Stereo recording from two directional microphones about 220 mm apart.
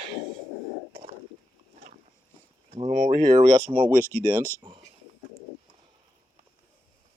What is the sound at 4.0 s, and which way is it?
Speech, 10° left (ahead or behind).